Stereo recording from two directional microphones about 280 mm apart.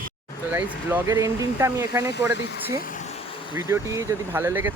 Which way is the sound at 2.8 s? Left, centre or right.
Left.